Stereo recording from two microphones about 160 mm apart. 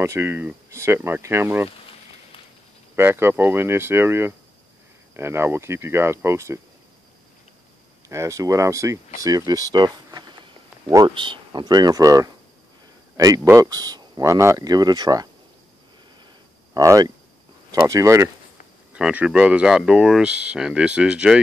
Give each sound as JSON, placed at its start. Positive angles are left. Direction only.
{"t": 0.0, "sound": "speech", "side_deg": -15}
{"t": 3.0, "sound": "speech", "side_deg": -15}
{"t": 8.1, "sound": "speech", "side_deg": -20}
{"t": 16.7, "sound": "speech", "side_deg": -20}
{"t": 18.9, "sound": "speech", "side_deg": -5}